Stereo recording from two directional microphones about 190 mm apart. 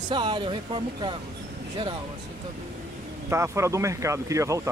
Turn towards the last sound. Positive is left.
turn(degrees=-15)  # may be behind; listen again after turning